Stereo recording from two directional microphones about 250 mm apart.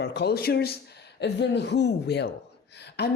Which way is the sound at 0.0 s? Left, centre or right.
Left.